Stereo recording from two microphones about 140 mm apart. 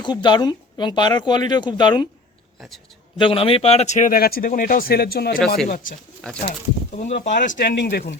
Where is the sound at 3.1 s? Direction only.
40° left (ahead or behind); by 6.0 s 90° left.